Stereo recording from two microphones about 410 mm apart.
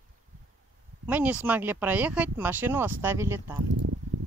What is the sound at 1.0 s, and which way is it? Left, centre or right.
Speech, centre.